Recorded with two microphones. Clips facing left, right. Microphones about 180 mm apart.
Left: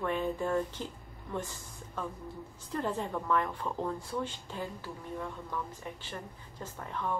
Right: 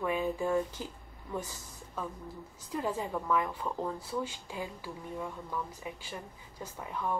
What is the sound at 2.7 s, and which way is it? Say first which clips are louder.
Speech: even; 5° right (ahead or behind).